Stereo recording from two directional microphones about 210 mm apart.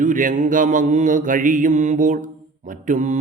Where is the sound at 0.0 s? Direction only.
40° right (ahead or behind).